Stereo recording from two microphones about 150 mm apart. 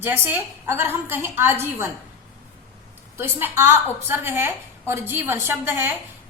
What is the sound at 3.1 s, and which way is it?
A woman's voice, 15° right (ahead or behind).